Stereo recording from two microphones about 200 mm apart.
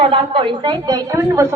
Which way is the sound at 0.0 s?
25° right (ahead or behind).